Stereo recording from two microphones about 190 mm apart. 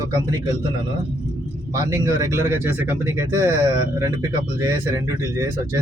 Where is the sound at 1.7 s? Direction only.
15° right (ahead or behind).